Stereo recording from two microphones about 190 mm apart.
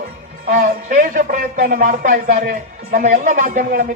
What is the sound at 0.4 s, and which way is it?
A man's voice, 40° right (ahead or behind).